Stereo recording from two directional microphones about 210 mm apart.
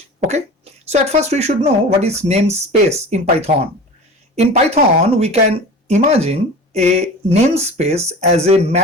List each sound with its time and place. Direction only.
0.2 s speech: 30° right (ahead or behind)